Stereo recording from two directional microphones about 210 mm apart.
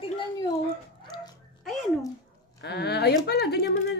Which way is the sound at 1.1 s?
20° left (ahead or behind).